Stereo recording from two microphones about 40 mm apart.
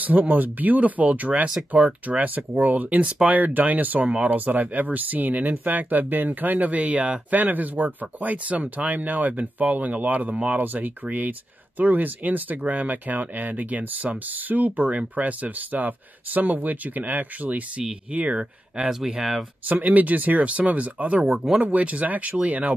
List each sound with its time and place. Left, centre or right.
0.0 s speech: right
7.2 s speech: right
10.6 s speech: right
18.9 s speech: centre
19.7 s speech: right